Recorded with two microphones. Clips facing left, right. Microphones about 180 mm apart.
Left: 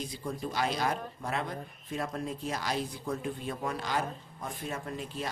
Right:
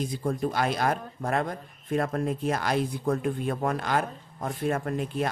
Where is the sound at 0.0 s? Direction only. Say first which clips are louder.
Right 8 dB; 50° right (ahead or behind).